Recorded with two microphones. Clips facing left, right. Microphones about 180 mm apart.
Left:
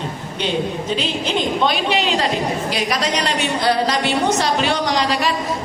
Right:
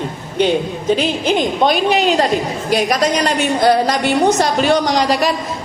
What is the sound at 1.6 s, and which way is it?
A woman's voice, 45° right (ahead or behind).